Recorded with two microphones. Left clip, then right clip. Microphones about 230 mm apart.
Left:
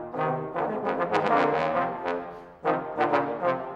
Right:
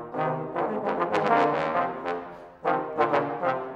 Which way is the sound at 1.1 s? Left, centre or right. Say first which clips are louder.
Right 1 dB; left.